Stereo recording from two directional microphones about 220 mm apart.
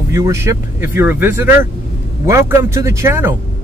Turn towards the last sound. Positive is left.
turn(degrees=-10)  # may be behind; listen again after turning